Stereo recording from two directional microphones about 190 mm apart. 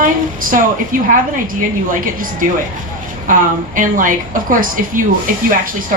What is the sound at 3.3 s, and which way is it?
A woman's voice, 45° right (ahead or behind).